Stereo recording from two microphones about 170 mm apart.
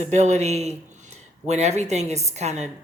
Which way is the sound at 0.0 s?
40° right (ahead or behind).